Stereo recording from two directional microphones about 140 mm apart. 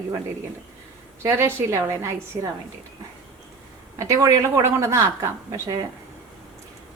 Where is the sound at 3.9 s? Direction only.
20° right (ahead or behind).